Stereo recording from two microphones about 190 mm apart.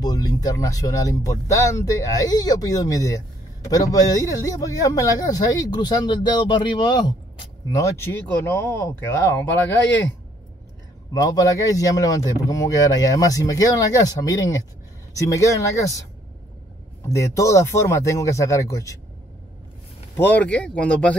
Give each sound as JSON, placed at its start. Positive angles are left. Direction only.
{"t": 0.0, "sound": "speech", "side_deg": 20}
{"t": 7.7, "sound": "speech", "side_deg": 15}
{"t": 11.1, "sound": "speech", "side_deg": 15}
{"t": 17.0, "sound": "speech", "side_deg": 15}
{"t": 20.2, "sound": "speech", "side_deg": 10}